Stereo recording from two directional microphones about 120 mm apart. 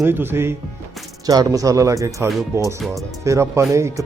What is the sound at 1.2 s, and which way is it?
Speech, 30° right (ahead or behind).